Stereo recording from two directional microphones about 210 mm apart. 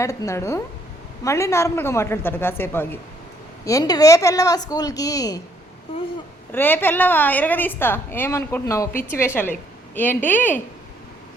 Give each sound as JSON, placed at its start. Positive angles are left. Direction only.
{"t": 0.0, "sound": "a woman's voice", "side_deg": 15}
{"t": 6.5, "sound": "a woman's voice", "side_deg": 10}